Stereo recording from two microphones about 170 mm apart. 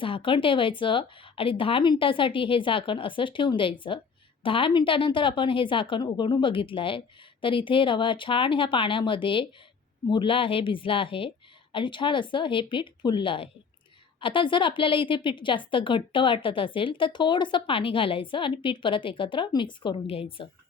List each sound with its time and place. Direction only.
0.0 s a woman's voice: 30° left (ahead or behind)